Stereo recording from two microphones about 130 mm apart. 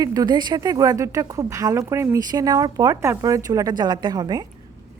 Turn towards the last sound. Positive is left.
turn(degrees=-30)  # may be behind; listen again after turning